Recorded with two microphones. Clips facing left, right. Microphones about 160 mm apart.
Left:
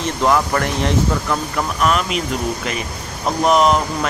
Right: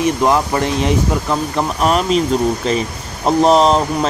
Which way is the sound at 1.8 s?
35° right (ahead or behind).